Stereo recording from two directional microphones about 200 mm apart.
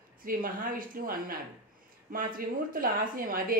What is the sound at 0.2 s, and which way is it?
Speech, 45° right (ahead or behind).